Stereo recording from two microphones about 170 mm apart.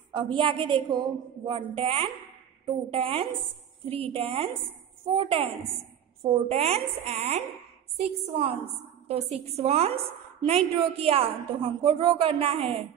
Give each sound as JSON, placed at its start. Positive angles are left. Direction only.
{"t": 0.1, "sound": "a woman's voice", "side_deg": -30}